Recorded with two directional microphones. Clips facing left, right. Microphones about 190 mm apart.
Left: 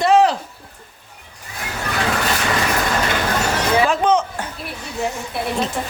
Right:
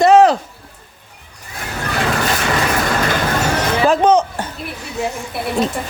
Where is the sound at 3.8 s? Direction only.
40° right (ahead or behind).